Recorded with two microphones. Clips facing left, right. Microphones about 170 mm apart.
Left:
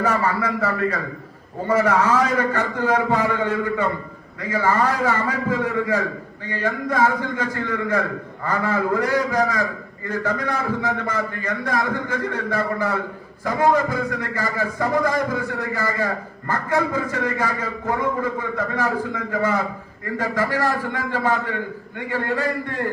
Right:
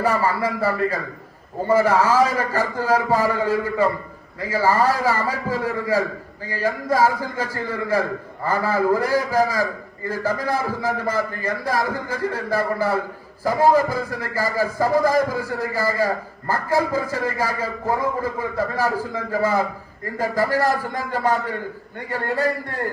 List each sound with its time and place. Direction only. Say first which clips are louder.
0.0 s a man's voice: right 1 dB; 35° right (ahead or behind)